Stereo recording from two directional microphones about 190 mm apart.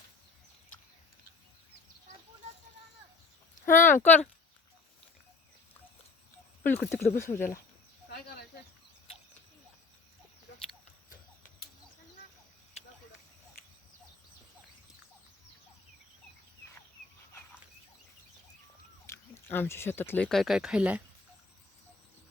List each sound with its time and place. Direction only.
3.7 s speech: 45° left (ahead or behind)
3.9 s speech: 10° left (ahead or behind)
6.6 s speech: 10° left (ahead or behind)
19.0 s speech: 15° left (ahead or behind); by 21.0 s 5° right (ahead or behind)